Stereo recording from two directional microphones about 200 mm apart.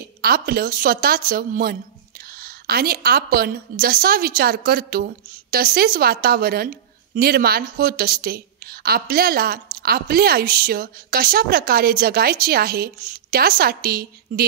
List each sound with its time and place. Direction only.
0.2 s a woman's voice: 50° right (ahead or behind)